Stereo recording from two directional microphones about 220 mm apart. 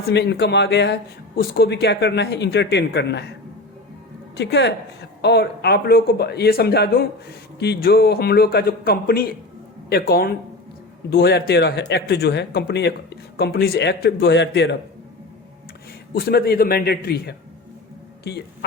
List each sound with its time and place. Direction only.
0.1 s a man's voice: 50° left (ahead or behind)
4.4 s a man's voice: 50° left (ahead or behind)
16.1 s a man's voice: 45° left (ahead or behind)